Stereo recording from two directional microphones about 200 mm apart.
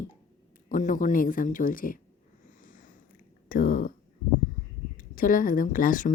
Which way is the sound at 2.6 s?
40° left (ahead or behind).